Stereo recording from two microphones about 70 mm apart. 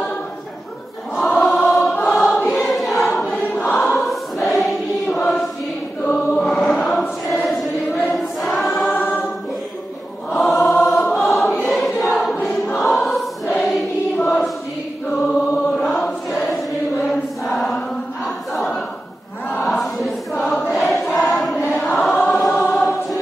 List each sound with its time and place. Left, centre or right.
1.1 s choir: centre
10.3 s choir: centre
19.8 s choir: centre